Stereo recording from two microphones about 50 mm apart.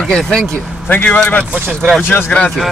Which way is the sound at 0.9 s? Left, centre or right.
Left.